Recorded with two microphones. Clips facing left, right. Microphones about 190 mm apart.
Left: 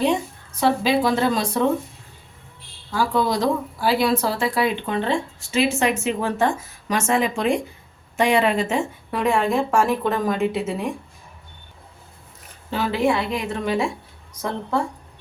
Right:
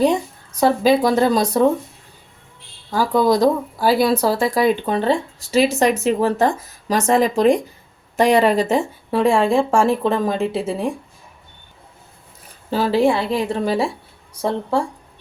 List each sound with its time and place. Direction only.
0.5 s speech: 40° right (ahead or behind)
2.9 s speech: 40° right (ahead or behind)
12.7 s speech: 35° right (ahead or behind)